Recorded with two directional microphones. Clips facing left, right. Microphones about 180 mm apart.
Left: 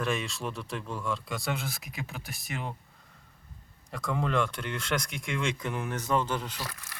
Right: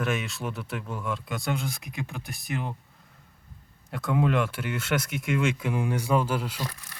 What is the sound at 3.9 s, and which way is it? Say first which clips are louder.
Speech: right 5 dB; 5° right (ahead or behind).